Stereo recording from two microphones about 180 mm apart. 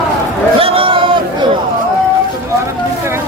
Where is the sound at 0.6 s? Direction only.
30° right (ahead or behind).